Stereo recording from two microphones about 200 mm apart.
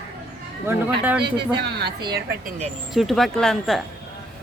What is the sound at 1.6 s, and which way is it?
Speech, 55° right (ahead or behind).